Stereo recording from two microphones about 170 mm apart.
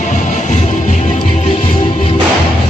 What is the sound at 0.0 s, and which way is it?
Music, 45° left (ahead or behind).